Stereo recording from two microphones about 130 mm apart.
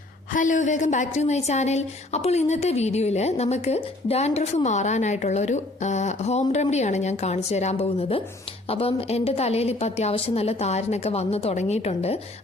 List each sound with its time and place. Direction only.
0.3 s a woman's voice: 80° left; by 12.2 s 55° left (ahead or behind)